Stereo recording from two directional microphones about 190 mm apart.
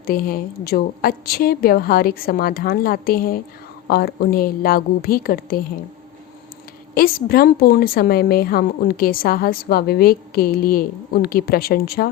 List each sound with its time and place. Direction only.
0.0 s a woman's voice: 50° left (ahead or behind)
6.9 s a woman's voice: 50° left (ahead or behind)